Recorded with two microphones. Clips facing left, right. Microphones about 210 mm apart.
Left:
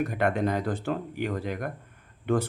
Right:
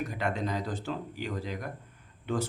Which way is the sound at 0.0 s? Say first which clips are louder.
Left 6 dB; 55° left (ahead or behind).